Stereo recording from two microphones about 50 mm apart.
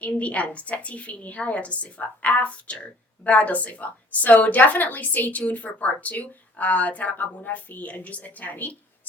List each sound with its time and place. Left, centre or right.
0.0 s a woman's voice: left